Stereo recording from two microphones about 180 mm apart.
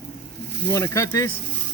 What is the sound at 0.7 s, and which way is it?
Speech, 15° left (ahead or behind).